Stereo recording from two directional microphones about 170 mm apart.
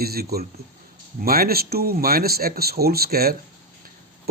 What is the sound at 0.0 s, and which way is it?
A man's voice, 65° right (ahead or behind).